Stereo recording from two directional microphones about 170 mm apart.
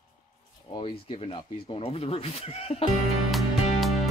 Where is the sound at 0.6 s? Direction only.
30° left (ahead or behind).